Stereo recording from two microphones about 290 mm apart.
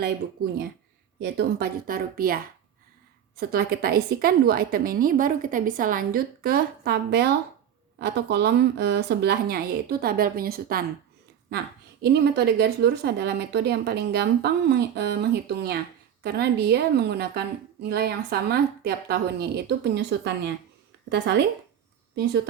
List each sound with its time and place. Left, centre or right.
1.2 s a woman's voice: right
12.0 s a woman's voice: right